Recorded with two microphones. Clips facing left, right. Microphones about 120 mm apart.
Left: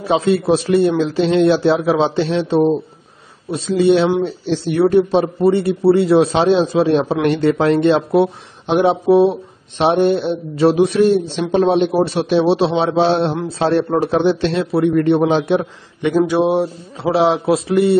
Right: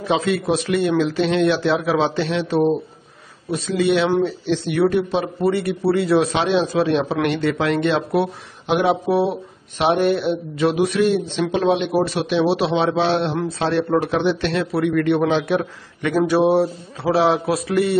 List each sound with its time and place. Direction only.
0.0 s a man's voice: 35° left (ahead or behind)